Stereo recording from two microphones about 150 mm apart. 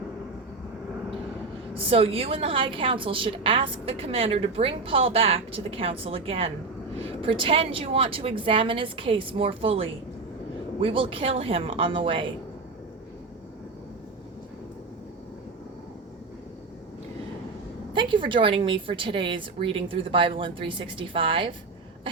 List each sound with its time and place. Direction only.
1.7 s a woman's voice: 40° right (ahead or behind)
17.9 s a woman's voice: 35° right (ahead or behind)